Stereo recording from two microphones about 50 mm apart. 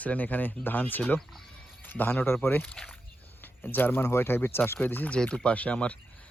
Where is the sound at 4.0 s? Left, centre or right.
Left.